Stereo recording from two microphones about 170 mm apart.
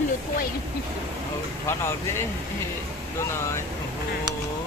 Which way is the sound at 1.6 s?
15° left (ahead or behind).